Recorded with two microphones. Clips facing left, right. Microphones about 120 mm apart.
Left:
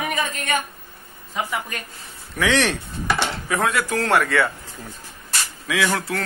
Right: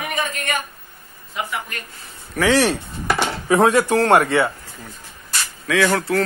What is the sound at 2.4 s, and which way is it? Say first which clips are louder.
Speech: right 4 dB; 10° right (ahead or behind).